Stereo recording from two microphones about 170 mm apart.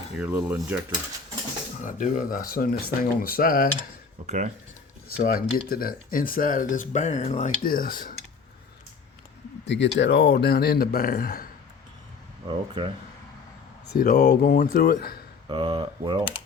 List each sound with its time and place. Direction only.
0.2 s speech: 10° right (ahead or behind)
1.8 s speech: 50° left (ahead or behind)
4.3 s speech: 45° right (ahead or behind)
5.1 s speech: 60° left (ahead or behind); by 7.5 s 40° left (ahead or behind)
7.6 s speech: 55° left (ahead or behind)
9.6 s speech: 90° left; by 11.4 s 60° left (ahead or behind)
12.5 s speech: 25° right (ahead or behind)
13.9 s speech: 60° left (ahead or behind)
15.4 s speech: 30° right (ahead or behind)